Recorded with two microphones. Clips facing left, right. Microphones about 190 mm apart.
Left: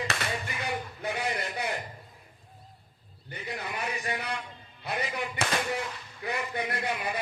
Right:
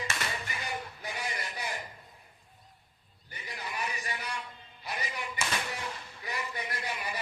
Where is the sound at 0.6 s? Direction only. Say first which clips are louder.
Left 5 dB; 60° left (ahead or behind).